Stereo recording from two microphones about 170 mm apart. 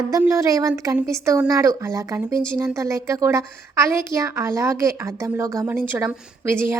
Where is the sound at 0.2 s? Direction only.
15° right (ahead or behind).